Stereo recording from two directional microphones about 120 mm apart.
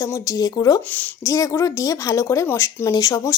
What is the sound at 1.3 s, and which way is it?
A woman's voice, 25° left (ahead or behind).